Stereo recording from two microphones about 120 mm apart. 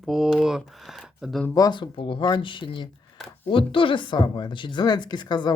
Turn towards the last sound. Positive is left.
turn(degrees=35)  # may be behind; listen again after turning